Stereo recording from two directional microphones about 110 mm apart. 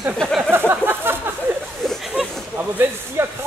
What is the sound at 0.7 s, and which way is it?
Speech, 20° right (ahead or behind).